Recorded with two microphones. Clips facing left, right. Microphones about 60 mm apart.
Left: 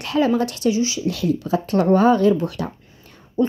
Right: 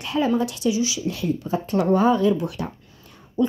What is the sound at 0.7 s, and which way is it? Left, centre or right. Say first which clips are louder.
Speech: left 2 dB; left.